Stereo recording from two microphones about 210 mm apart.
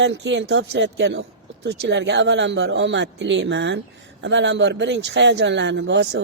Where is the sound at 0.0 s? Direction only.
60° right (ahead or behind).